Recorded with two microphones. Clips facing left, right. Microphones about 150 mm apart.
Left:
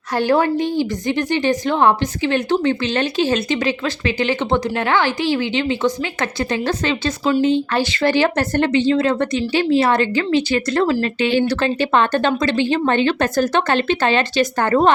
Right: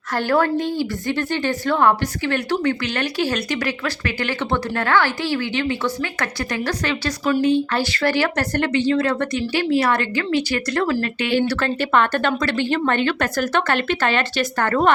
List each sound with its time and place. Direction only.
0.1 s a woman's voice: 15° left (ahead or behind)